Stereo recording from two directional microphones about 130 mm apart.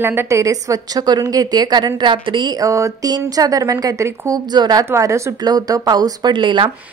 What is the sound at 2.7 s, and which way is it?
A woman's voice, 25° right (ahead or behind).